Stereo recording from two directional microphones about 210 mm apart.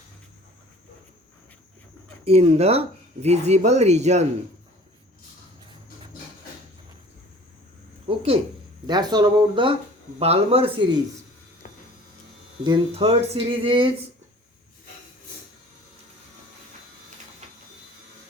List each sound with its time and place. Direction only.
2.2 s speech: 30° right (ahead or behind)
8.0 s a sound: 25° right (ahead or behind)
8.9 s speech: 20° right (ahead or behind)
12.6 s speech: 25° right (ahead or behind)